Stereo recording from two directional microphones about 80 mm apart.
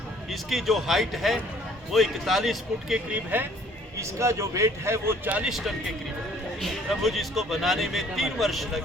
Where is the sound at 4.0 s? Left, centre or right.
Right.